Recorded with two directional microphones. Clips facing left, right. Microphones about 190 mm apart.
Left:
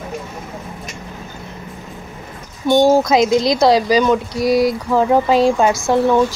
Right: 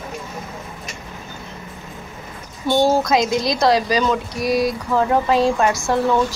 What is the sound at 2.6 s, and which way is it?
Speech, 20° left (ahead or behind).